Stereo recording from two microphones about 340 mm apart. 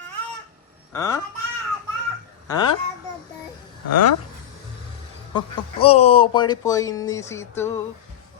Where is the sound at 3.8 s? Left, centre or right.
Left.